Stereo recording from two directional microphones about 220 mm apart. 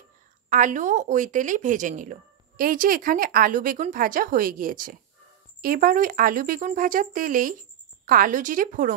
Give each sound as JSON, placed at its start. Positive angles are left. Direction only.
{"t": 0.5, "sound": "speech", "side_deg": -35}